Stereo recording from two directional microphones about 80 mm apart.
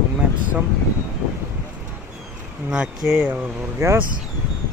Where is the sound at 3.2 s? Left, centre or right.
Right.